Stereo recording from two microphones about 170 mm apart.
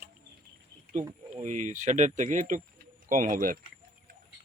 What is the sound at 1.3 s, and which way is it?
Speech, 45° right (ahead or behind).